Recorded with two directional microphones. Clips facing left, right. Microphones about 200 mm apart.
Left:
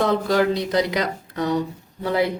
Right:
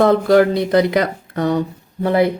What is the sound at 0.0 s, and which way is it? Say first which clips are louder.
Speech: right 7 dB; 55° right (ahead or behind).